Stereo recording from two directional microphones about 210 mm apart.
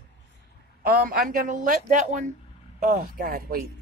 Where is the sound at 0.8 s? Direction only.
45° right (ahead or behind).